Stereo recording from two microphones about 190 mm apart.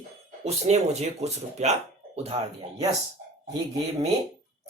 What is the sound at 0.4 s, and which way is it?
Speech, 35° right (ahead or behind).